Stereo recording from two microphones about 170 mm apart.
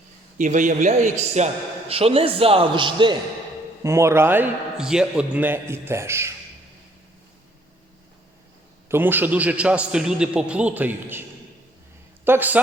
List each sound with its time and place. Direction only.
0.3 s a man's voice: 50° right (ahead or behind); by 3.2 s 30° right (ahead or behind)
3.8 s a man's voice: 15° right (ahead or behind)
8.9 s a man's voice: 10° right (ahead or behind)
12.2 s a man's voice: 10° right (ahead or behind)